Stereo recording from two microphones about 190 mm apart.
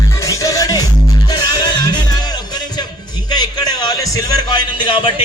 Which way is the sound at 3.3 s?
20° left (ahead or behind).